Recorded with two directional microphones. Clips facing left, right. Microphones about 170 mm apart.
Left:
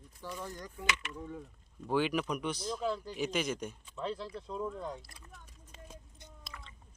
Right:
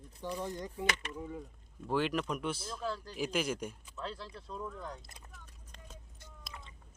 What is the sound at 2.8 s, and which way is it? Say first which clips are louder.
Speech: left 4 dB; 15° left (ahead or behind).